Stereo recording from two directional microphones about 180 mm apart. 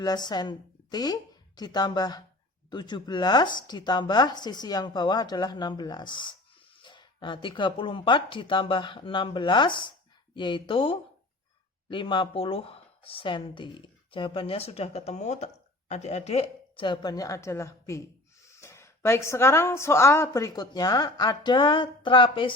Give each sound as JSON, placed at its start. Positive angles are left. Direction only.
{"t": 0.0, "sound": "a woman's voice", "side_deg": 20}